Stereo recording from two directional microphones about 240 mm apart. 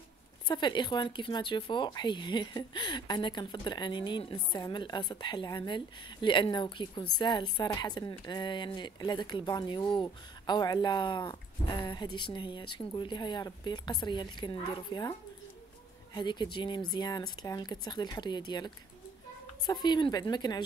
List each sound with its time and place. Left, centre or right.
0.5 s speech: centre
16.2 s speech: centre